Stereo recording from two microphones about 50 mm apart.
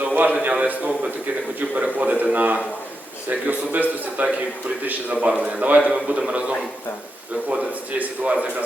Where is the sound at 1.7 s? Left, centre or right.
Right.